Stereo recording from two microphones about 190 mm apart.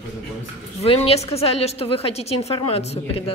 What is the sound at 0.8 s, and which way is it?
Speech, 30° left (ahead or behind).